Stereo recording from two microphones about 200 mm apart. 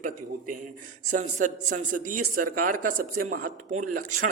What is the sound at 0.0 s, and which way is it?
A man's voice, 40° right (ahead or behind).